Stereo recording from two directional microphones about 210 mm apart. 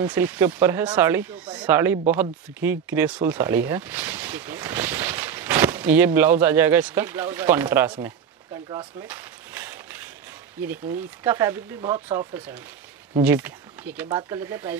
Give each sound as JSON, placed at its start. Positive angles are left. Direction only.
{"t": 0.0, "sound": "speech", "side_deg": -10}
{"t": 9.0, "sound": "a sound", "side_deg": -10}
{"t": 11.2, "sound": "speech", "side_deg": -15}